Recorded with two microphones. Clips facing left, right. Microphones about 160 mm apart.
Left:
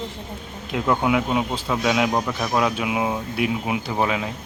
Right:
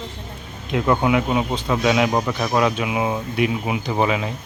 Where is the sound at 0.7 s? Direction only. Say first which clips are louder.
Right 2 dB; centre (ahead or behind).